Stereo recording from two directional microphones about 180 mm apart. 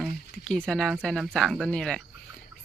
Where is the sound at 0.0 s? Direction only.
5° left (ahead or behind).